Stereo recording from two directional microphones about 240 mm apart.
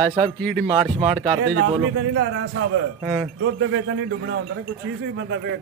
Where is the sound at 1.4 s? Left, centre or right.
Right.